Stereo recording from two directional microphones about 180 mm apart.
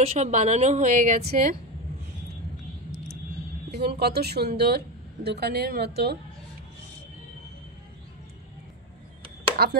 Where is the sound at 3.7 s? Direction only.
65° right (ahead or behind).